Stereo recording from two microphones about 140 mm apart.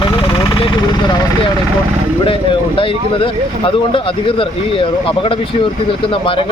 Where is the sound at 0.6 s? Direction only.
30° left (ahead or behind).